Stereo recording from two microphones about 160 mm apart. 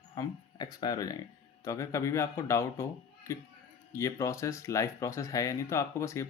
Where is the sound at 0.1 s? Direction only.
25° left (ahead or behind).